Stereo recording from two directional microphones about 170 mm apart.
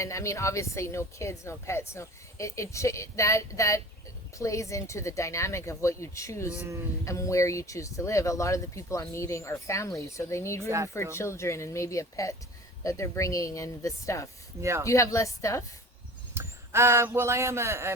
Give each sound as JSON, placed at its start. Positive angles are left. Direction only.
{"t": 0.0, "sound": "speech", "side_deg": 20}
{"t": 14.6, "sound": "speech", "side_deg": -15}
{"t": 14.8, "sound": "speech", "side_deg": 20}
{"t": 16.3, "sound": "speech", "side_deg": -15}